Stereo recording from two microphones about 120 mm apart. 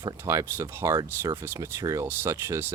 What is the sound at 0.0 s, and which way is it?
Speech, 25° right (ahead or behind).